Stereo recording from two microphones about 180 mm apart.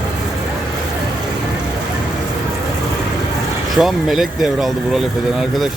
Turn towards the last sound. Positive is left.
turn(degrees=0)  # may be behind; listen again after turning